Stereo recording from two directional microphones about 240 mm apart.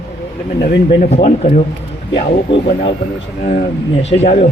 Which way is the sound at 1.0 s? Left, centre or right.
Left.